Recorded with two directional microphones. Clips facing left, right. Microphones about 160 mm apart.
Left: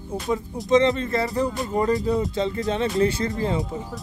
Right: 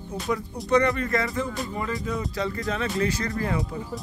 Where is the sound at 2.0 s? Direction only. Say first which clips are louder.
Left 6 dB; 25° left (ahead or behind).